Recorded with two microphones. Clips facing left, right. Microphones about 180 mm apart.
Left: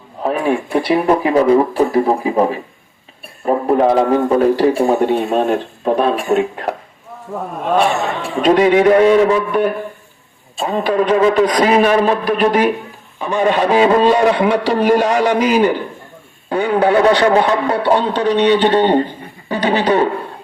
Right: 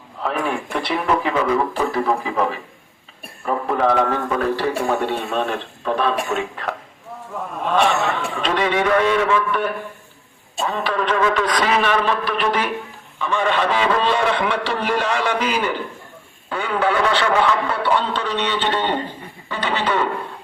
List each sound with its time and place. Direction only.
0.2 s speech: 40° left (ahead or behind)
3.4 s a man's voice: 35° left (ahead or behind)
18.1 s a man's voice: 15° left (ahead or behind)
18.7 s a man's voice: 40° left (ahead or behind)